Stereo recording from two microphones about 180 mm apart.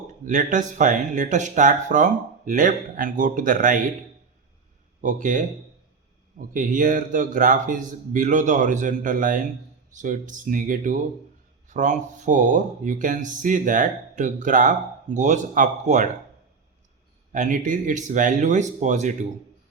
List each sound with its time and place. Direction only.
0.1 s speech: 45° right (ahead or behind)
4.9 s speech: 45° right (ahead or behind)
6.5 s speech: 45° right (ahead or behind)
17.3 s speech: 45° right (ahead or behind)